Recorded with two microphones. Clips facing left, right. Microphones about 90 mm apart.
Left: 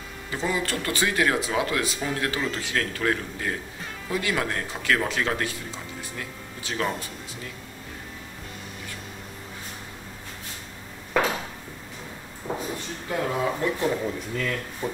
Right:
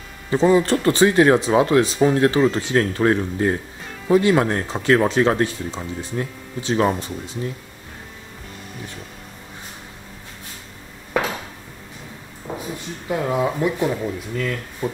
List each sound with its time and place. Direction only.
0.3 s speech: 30° right (ahead or behind)
12.4 s a sound: 15° right (ahead or behind)
13.1 s speech: 15° right (ahead or behind)